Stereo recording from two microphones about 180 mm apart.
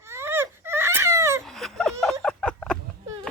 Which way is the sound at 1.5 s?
Centre (ahead or behind).